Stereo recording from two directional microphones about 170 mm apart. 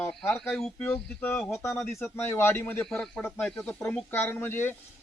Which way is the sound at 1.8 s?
Centre (ahead or behind).